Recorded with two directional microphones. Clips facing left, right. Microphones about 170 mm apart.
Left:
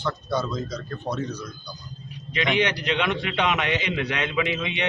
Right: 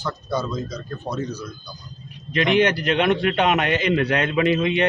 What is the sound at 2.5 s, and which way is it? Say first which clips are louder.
A man's voice: right 6 dB; 50° right (ahead or behind).